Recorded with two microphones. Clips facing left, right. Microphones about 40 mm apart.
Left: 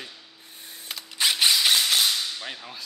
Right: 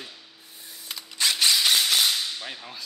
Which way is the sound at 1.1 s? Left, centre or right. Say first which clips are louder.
Left 1 dB; centre.